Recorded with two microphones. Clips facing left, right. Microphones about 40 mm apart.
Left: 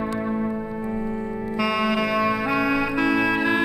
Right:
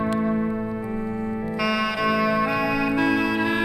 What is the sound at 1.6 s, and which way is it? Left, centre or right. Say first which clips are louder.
Music: left 1 dB; centre.